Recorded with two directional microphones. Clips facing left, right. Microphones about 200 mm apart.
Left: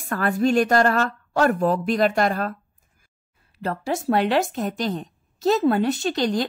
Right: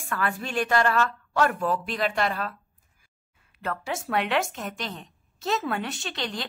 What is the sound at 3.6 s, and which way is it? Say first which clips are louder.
A woman's voice: left 6 dB; 35° left (ahead or behind).